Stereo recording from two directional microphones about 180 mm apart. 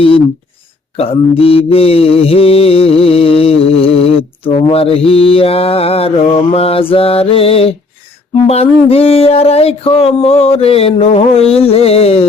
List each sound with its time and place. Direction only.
0.9 s mantra: 30° left (ahead or behind)